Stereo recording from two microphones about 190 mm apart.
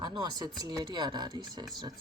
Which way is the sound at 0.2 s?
20° right (ahead or behind).